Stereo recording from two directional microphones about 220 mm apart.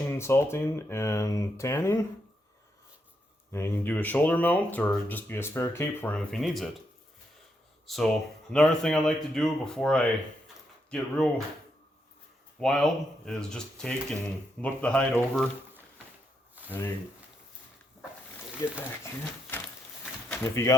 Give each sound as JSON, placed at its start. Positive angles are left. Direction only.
{"t": 0.1, "sound": "speech", "side_deg": 10}
{"t": 3.5, "sound": "speech", "side_deg": 10}
{"t": 7.9, "sound": "speech", "side_deg": 0}
{"t": 12.5, "sound": "speech", "side_deg": 0}
{"t": 16.6, "sound": "a sound", "side_deg": -5}
{"t": 18.6, "sound": "speech", "side_deg": 15}
{"t": 20.3, "sound": "speech", "side_deg": 10}